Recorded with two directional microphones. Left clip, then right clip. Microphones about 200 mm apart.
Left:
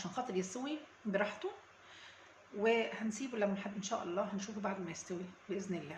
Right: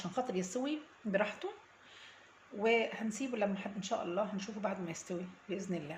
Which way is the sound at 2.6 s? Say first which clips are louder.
Right 2 dB; 20° right (ahead or behind).